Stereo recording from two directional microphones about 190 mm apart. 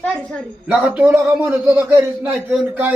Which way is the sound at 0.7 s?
5° right (ahead or behind).